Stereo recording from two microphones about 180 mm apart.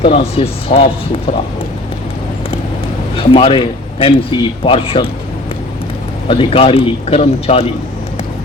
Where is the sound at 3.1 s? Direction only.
30° left (ahead or behind).